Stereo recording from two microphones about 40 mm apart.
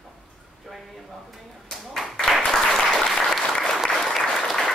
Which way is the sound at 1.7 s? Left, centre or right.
Centre.